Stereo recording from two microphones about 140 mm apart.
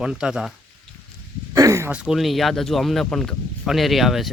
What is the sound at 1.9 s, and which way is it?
Speech, 10° right (ahead or behind).